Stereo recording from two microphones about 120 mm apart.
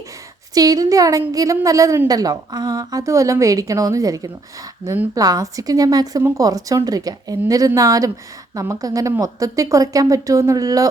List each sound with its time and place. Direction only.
0.5 s a woman's voice: 30° right (ahead or behind)